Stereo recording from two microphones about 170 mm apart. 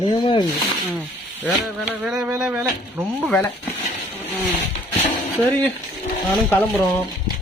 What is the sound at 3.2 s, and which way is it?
Speech, 10° left (ahead or behind).